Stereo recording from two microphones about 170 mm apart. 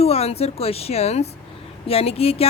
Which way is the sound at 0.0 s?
35° left (ahead or behind).